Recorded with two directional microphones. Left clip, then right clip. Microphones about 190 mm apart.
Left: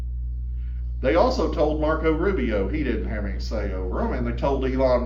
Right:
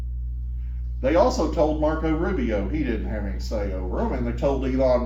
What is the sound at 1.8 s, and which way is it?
Speech, 30° right (ahead or behind).